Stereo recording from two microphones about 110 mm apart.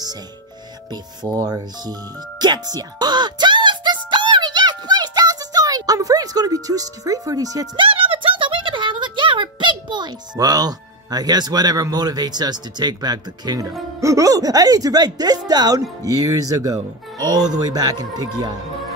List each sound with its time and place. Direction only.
1.2 s music: 35° right (ahead or behind)
7.7 s speech: 50° right (ahead or behind)